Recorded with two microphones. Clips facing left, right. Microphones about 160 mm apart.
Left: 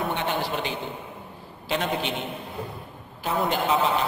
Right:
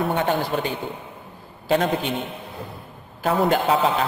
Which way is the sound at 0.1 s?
40° right (ahead or behind).